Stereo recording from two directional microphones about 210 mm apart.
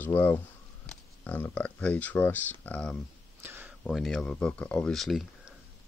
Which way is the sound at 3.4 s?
10° right (ahead or behind).